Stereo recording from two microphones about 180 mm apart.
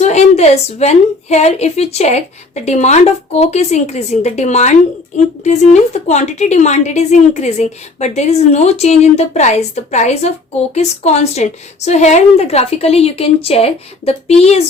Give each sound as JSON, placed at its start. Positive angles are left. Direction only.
{"t": 0.0, "sound": "a woman's voice", "side_deg": 40}